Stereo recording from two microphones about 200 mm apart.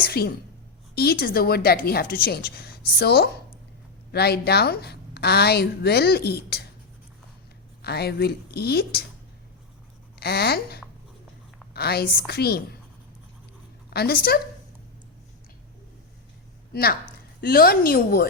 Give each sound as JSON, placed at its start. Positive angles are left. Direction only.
{"t": 0.0, "sound": "a woman's voice", "side_deg": 50}
{"t": 7.8, "sound": "a woman's voice", "side_deg": 55}
{"t": 10.2, "sound": "a woman's voice", "side_deg": 55}
{"t": 13.9, "sound": "a woman's voice", "side_deg": 50}
{"t": 17.4, "sound": "a woman's voice", "side_deg": 45}